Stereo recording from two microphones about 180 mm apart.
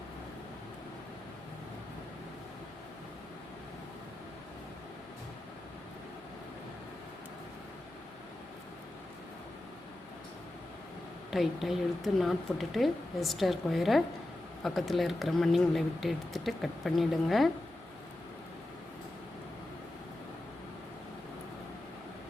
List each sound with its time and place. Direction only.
11.3 s speech: centre (ahead or behind)